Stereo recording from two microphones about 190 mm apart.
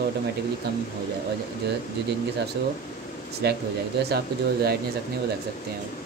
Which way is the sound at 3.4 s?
60° right (ahead or behind).